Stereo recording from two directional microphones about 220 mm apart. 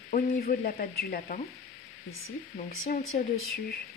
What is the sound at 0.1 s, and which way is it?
Frying, 40° left (ahead or behind).